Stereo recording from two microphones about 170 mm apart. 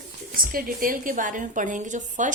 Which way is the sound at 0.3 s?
55° right (ahead or behind).